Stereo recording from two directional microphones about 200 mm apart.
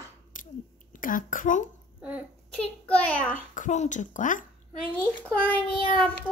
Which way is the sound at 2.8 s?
5° left (ahead or behind).